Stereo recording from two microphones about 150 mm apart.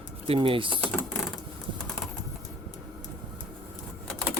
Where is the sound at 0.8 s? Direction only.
5° left (ahead or behind).